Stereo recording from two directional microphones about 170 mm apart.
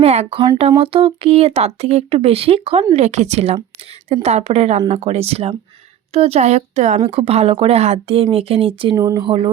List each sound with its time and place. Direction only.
0.0 s speech: 40° right (ahead or behind)